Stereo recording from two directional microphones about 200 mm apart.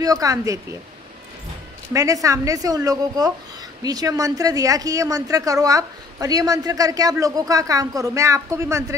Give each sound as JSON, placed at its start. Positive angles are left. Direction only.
{"t": 0.0, "sound": "speech", "side_deg": -15}
{"t": 2.2, "sound": "speech", "side_deg": -15}